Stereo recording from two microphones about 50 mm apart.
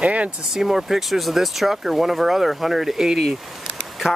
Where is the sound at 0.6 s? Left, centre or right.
Centre.